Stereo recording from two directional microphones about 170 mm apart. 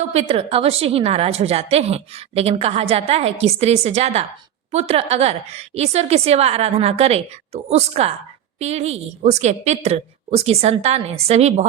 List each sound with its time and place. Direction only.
0.1 s a woman's voice: 35° right (ahead or behind)